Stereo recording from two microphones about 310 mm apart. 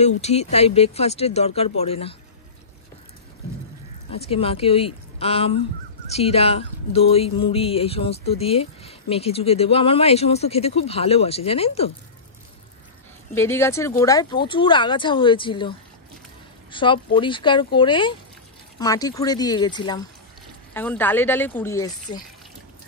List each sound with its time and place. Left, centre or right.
0.2 s speech: centre
4.1 s speech: centre
13.3 s speech: centre
16.7 s speech: centre